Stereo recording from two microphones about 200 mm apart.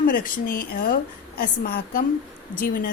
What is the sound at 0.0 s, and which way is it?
Speech, 45° left (ahead or behind).